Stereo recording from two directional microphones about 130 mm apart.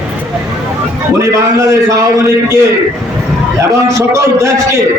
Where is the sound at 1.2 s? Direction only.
25° right (ahead or behind).